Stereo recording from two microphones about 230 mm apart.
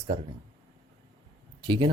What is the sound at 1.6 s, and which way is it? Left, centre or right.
Speech, centre.